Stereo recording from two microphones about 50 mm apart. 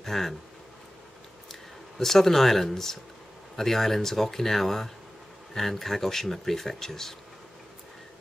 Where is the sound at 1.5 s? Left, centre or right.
Centre.